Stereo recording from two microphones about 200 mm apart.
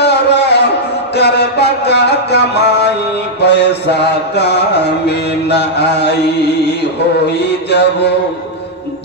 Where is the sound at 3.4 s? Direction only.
55° left (ahead or behind).